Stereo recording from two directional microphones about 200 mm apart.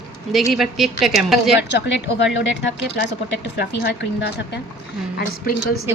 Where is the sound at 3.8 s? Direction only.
60° left (ahead or behind).